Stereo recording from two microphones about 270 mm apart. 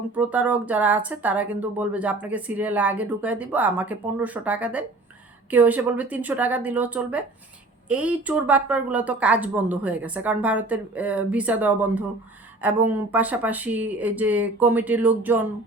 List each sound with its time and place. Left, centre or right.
0.1 s speech: centre